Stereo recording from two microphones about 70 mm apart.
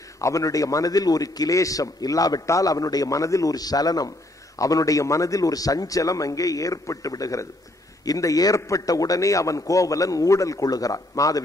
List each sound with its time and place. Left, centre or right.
0.2 s a man's voice: left